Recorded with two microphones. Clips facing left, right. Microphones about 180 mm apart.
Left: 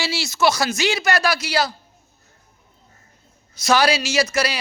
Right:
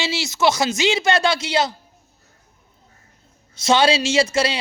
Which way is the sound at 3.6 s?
25° right (ahead or behind).